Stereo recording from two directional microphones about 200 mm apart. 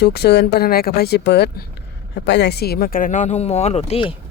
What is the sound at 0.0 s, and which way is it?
Speech, 55° left (ahead or behind).